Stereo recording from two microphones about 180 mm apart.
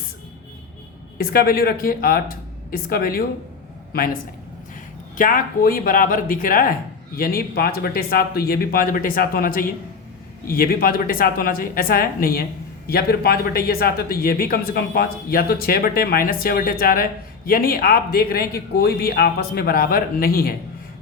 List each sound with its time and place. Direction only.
1.2 s a woman's voice: 55° left (ahead or behind)